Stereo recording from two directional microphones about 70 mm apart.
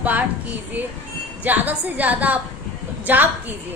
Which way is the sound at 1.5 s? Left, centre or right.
Right.